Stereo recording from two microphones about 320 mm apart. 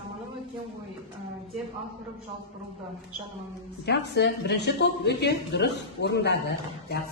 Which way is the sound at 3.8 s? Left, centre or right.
Left.